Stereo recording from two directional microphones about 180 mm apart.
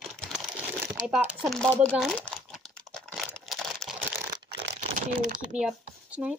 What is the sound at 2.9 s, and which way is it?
Crumpling, centre (ahead or behind).